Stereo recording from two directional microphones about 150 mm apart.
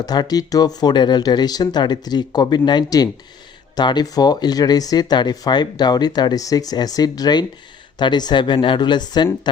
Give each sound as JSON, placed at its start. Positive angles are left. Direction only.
{"t": 0.0, "sound": "speech", "side_deg": 25}